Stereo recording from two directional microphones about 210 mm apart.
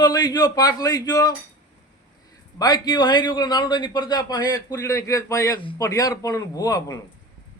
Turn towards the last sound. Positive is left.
turn(degrees=15)  # may be behind; listen again after turning